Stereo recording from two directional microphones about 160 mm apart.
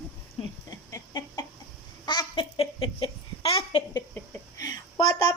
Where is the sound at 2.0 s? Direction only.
25° left (ahead or behind).